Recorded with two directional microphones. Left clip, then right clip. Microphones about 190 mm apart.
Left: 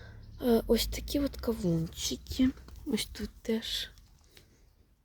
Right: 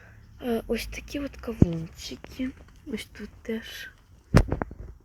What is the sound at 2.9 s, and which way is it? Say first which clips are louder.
Speech: left 1 dB; 25° left (ahead or behind).